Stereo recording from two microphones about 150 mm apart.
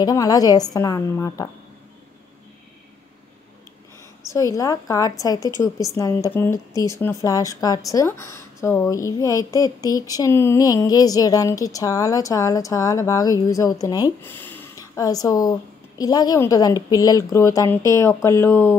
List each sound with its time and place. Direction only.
0.0 s a woman's voice: 25° left (ahead or behind)
4.3 s a woman's voice: 20° left (ahead or behind)
14.2 s a sound: 15° left (ahead or behind)
16.0 s a woman's voice: 25° left (ahead or behind)